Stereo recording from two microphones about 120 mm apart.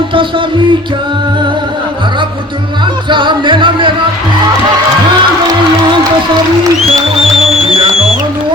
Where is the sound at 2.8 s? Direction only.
40° right (ahead or behind).